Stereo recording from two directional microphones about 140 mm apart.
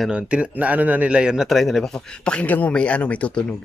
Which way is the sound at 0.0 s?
10° right (ahead or behind).